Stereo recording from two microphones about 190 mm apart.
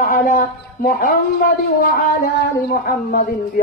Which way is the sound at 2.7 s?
50° left (ahead or behind).